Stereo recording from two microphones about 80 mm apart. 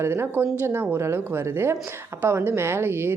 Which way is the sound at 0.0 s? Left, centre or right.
Right.